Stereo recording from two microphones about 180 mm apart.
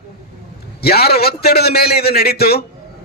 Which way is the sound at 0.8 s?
60° left (ahead or behind).